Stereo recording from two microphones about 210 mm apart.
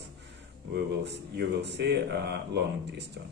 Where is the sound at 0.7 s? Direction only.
55° right (ahead or behind).